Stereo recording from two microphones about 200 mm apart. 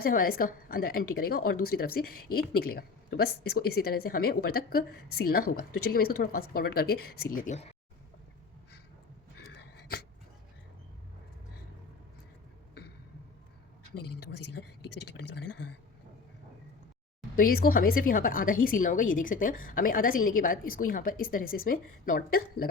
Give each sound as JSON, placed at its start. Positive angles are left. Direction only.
{"t": 0.0, "sound": "a woman's voice", "side_deg": 45}
{"t": 13.9, "sound": "a woman's voice", "side_deg": 55}
{"t": 17.3, "sound": "a woman's voice", "side_deg": 45}